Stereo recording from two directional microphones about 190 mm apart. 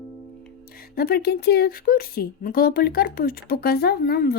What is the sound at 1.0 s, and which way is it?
Speech, 55° left (ahead or behind).